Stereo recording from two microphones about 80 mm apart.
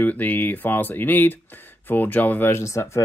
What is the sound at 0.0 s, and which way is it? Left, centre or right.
Speech, left.